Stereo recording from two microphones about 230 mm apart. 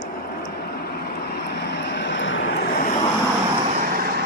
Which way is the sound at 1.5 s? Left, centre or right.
Left.